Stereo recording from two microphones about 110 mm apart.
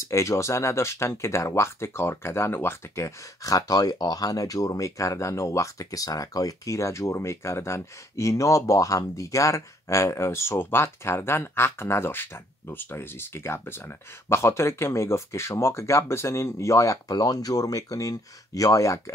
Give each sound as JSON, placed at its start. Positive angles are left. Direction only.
{"t": 0.0, "sound": "speech", "side_deg": 25}